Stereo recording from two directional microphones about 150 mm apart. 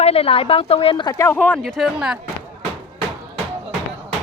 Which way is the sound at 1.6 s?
Centre (ahead or behind).